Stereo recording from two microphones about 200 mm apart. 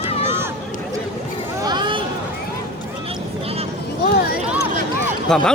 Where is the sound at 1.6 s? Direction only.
20° right (ahead or behind).